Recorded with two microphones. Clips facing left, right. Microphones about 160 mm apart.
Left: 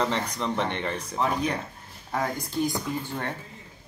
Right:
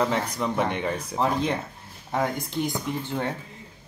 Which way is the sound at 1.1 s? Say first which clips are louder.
Right 1 dB; 30° right (ahead or behind).